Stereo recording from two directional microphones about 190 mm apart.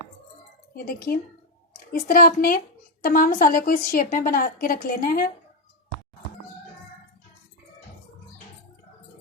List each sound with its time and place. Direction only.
0.9 s a woman's voice: 50° left (ahead or behind)